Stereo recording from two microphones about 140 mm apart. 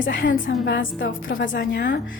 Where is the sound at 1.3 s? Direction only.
90° left.